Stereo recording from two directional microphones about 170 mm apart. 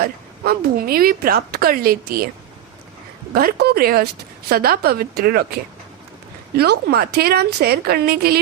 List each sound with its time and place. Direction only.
0.0 s speech: 60° right (ahead or behind)
3.3 s speech: 65° right (ahead or behind)
6.6 s speech: 70° right (ahead or behind)